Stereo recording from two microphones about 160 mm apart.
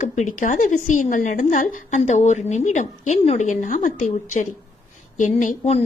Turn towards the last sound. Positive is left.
turn(degrees=45)  # may be behind; listen again after turning